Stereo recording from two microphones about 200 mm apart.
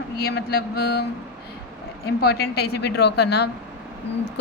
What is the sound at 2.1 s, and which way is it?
A woman's voice, 55° left (ahead or behind).